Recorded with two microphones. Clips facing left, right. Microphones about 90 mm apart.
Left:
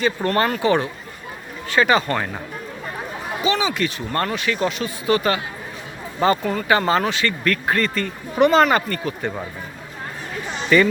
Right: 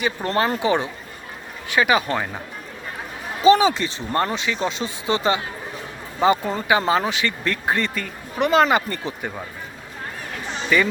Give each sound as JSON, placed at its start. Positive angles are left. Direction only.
{"t": 0.0, "sound": "speech", "side_deg": -15}
{"t": 3.4, "sound": "speech", "side_deg": -35}
{"t": 6.7, "sound": "speech", "side_deg": -10}
{"t": 8.0, "sound": "speech", "side_deg": -5}
{"t": 8.6, "sound": "speech", "side_deg": -20}
{"t": 10.7, "sound": "speech", "side_deg": -10}